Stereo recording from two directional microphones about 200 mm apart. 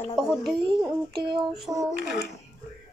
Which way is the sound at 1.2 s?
25° right (ahead or behind).